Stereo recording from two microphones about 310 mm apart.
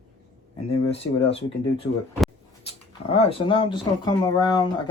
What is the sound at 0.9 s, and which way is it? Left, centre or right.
Speech, centre.